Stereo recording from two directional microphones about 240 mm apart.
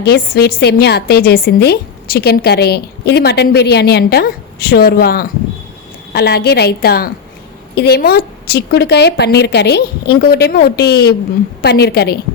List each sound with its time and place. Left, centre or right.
0.0 s a woman's voice: left